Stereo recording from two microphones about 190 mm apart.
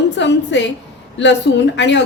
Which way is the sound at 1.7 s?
65° left (ahead or behind).